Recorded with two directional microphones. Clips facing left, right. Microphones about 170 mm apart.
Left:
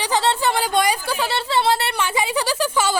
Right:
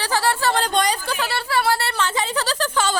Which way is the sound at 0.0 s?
20° left (ahead or behind).